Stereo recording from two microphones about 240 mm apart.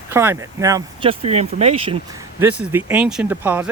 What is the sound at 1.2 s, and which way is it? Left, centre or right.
Speech, right.